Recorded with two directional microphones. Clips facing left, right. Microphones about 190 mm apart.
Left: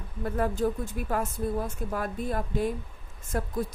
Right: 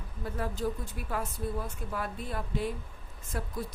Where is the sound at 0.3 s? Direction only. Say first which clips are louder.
Left 6 dB; 50° left (ahead or behind).